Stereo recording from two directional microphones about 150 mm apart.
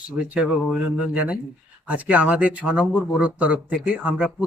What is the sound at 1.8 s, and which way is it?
Speech, 10° right (ahead or behind).